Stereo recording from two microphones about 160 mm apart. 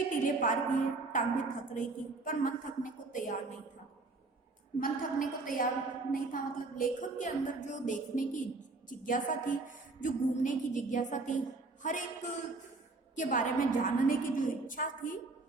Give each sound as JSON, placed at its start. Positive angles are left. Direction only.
{"t": 0.1, "sound": "a woman's voice", "side_deg": 55}
{"t": 4.8, "sound": "a woman's voice", "side_deg": 60}